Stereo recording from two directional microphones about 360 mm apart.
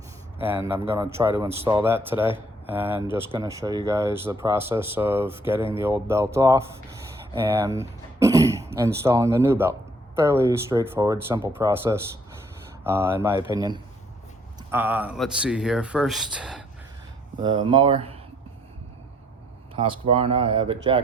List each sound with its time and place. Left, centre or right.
0.4 s speech: centre
17.4 s speech: centre
19.8 s speech: centre